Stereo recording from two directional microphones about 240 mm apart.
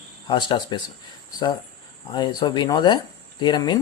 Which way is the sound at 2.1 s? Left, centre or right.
Centre.